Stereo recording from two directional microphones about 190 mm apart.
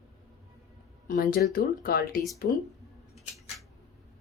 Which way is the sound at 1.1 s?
45° left (ahead or behind).